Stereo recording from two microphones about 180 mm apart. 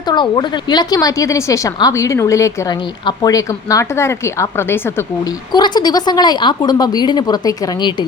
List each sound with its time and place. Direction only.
0.1 s a woman's voice: 25° left (ahead or behind)
5.5 s speech: 25° left (ahead or behind)